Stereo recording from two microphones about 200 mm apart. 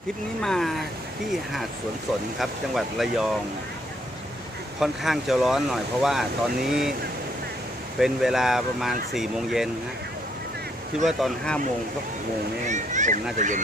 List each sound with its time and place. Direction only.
0.4 s speech: centre (ahead or behind)
2.4 s speech: centre (ahead or behind)
4.8 s speech: centre (ahead or behind)
7.9 s speech: centre (ahead or behind)
11.0 s speech: centre (ahead or behind)
12.6 s speech: 35° right (ahead or behind)